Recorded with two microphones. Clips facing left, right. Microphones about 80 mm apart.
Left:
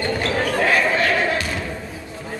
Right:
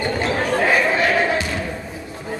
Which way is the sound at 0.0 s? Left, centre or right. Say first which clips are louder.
Right 1 dB; centre.